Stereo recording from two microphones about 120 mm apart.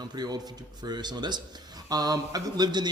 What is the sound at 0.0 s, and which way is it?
Speech, 35° right (ahead or behind).